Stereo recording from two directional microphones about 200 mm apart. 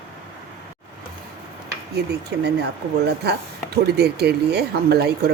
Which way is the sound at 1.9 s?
55° right (ahead or behind).